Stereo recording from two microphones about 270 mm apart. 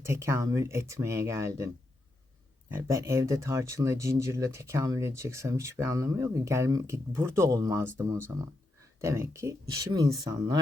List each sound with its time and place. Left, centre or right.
0.0 s speech: centre